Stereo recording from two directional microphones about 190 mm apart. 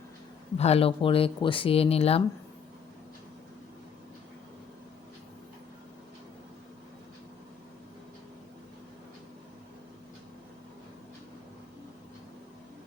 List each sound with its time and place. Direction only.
0.5 s speech: 35° left (ahead or behind)